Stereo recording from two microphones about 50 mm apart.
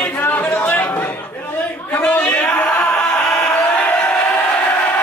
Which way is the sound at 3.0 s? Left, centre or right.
Centre.